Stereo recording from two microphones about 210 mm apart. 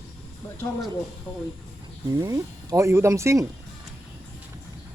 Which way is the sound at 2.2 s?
15° right (ahead or behind).